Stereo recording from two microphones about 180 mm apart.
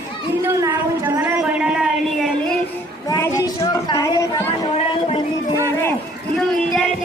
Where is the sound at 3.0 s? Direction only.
20° left (ahead or behind).